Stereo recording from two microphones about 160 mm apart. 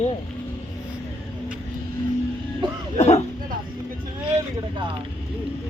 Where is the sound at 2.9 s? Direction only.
40° left (ahead or behind).